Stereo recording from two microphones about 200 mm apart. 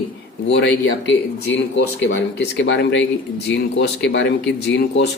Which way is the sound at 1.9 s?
65° left (ahead or behind).